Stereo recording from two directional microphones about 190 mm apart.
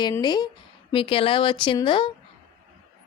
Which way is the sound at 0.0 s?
20° left (ahead or behind).